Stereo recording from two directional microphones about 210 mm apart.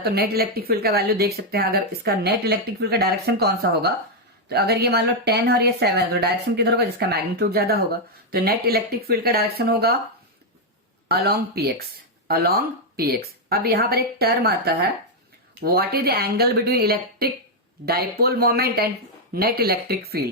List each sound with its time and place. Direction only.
0.0 s speech: 50° right (ahead or behind)
11.1 s speech: 50° right (ahead or behind)